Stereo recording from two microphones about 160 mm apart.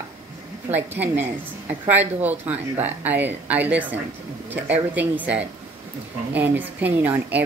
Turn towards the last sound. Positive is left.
turn(degrees=-10)  # may be behind; listen again after turning